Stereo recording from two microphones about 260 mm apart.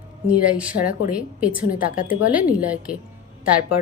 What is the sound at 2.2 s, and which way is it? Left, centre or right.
Speech, centre.